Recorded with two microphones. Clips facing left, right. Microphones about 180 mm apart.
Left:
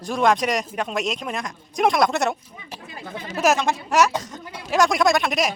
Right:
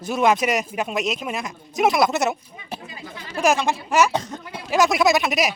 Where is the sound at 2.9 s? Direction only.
55° left (ahead or behind).